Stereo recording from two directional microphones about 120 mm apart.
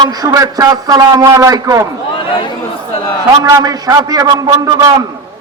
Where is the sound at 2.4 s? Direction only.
45° left (ahead or behind).